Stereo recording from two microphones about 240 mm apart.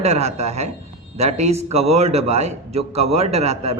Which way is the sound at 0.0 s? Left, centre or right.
Right.